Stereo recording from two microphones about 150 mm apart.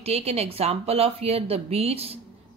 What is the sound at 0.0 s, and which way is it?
A woman's voice, 45° right (ahead or behind).